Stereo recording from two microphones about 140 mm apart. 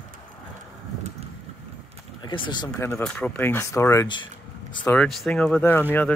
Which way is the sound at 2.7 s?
20° left (ahead or behind).